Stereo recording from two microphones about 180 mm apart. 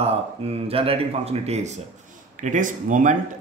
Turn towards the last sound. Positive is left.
turn(degrees=-45)  # may be behind; listen again after turning